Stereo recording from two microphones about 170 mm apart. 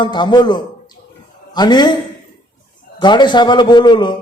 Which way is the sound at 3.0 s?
25° left (ahead or behind).